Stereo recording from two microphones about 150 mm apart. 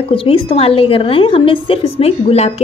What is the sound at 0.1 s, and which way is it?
A woman's voice, 35° left (ahead or behind).